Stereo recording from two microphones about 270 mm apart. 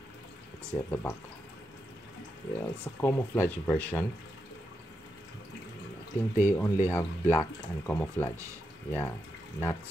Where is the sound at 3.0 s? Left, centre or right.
Centre.